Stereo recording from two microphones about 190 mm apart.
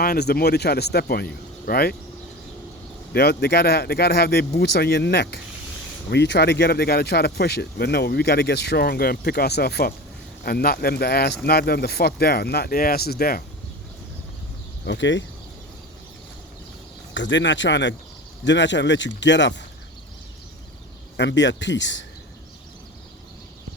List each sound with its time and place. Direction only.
0.0 s speech: 55° left (ahead or behind)
3.1 s speech: 60° left (ahead or behind)
14.8 s speech: 70° left (ahead or behind)
17.2 s speech: 70° left (ahead or behind)
21.2 s speech: 70° left (ahead or behind)